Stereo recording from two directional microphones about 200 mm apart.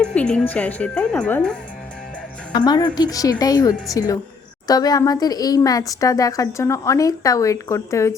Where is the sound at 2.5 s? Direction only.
20° left (ahead or behind).